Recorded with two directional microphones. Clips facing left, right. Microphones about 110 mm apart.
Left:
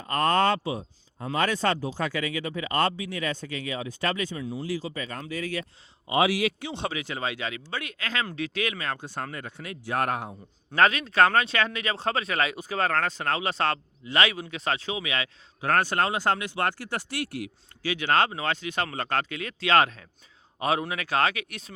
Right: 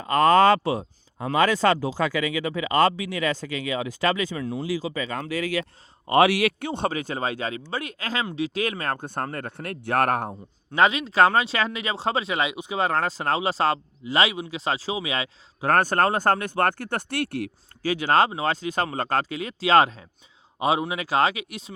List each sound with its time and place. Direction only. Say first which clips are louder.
0.5 s speech: right 6 dB; 80° right
6.1 s speech: right 5 dB; 65° right (ahead or behind)
10.8 s speech: right 2 dB; 25° right (ahead or behind); by 17.5 s 60° right (ahead or behind)
17.8 s speech: right 4 dB; 35° right (ahead or behind)
20.6 s speech: right 3 dB; 20° right (ahead or behind)